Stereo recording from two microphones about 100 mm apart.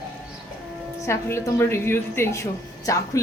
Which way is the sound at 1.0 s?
30° left (ahead or behind).